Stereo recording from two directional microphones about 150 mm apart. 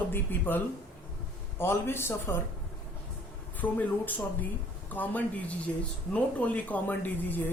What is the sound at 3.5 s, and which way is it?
Speech, 10° left (ahead or behind).